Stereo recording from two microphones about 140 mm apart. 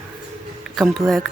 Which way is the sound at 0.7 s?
Centre (ahead or behind).